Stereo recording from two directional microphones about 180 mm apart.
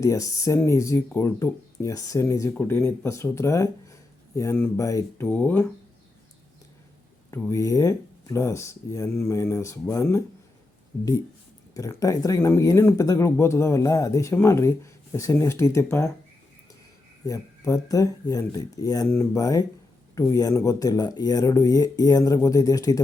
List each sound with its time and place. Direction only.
0.0 s speech: 15° left (ahead or behind)
7.3 s speech: 15° left (ahead or behind)
11.7 s speech: 20° left (ahead or behind)
17.2 s speech: 20° left (ahead or behind)